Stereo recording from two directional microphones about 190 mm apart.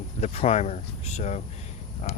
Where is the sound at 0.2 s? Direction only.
35° left (ahead or behind).